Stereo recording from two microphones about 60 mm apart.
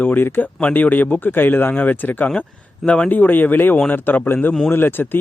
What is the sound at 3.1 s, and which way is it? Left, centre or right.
Speech, left.